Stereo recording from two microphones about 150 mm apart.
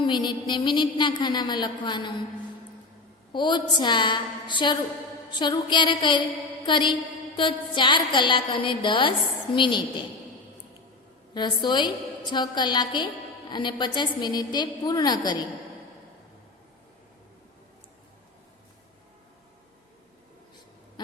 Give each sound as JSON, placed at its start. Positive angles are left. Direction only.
{"t": 0.0, "sound": "a woman's voice", "side_deg": 30}
{"t": 3.3, "sound": "a woman's voice", "side_deg": 30}
{"t": 11.3, "sound": "a woman's voice", "side_deg": 30}